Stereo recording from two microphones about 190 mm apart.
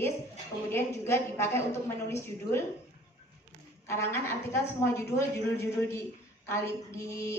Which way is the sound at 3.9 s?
15° left (ahead or behind).